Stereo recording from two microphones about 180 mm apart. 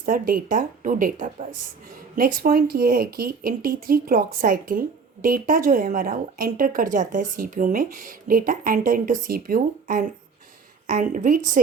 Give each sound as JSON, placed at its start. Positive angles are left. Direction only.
{"t": 0.0, "sound": "speech", "side_deg": -50}